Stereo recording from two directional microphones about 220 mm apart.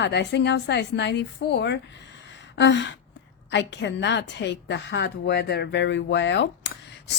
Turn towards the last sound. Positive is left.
turn(degrees=55)  # may be behind; listen again after turning